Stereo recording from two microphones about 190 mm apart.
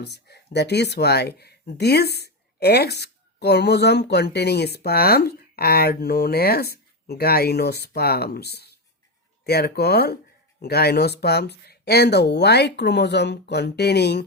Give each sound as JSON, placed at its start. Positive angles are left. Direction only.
{"t": 0.0, "sound": "speech", "side_deg": 60}